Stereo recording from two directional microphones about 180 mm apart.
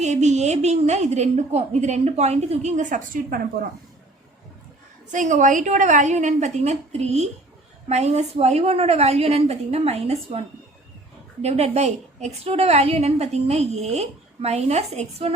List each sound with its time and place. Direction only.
0.0 s a woman's voice: 40° right (ahead or behind)
5.1 s a woman's voice: 45° right (ahead or behind)
11.4 s a woman's voice: 35° right (ahead or behind)